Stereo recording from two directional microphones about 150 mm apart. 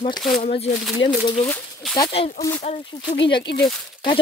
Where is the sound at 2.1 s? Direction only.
45° left (ahead or behind).